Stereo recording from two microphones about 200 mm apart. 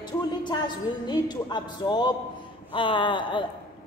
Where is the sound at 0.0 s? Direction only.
20° left (ahead or behind).